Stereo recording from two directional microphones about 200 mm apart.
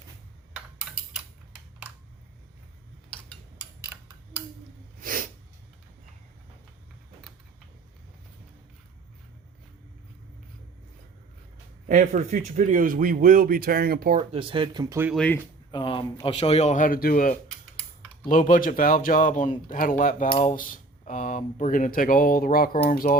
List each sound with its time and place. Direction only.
4.9 s sneeze: 45° right (ahead or behind)
11.9 s speech: 40° right (ahead or behind)
14.2 s speech: 25° right (ahead or behind)
15.1 s speech: 5° left (ahead or behind)
15.7 s a sound: 25° left (ahead or behind)
16.2 s speech: 30° left (ahead or behind); by 23.1 s 45° left (ahead or behind)